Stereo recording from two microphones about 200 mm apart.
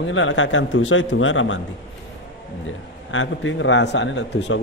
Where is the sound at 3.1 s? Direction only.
70° left (ahead or behind).